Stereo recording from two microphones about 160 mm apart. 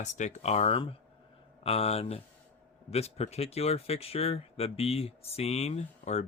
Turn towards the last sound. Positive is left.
turn(degrees=45)  # may be behind; listen again after turning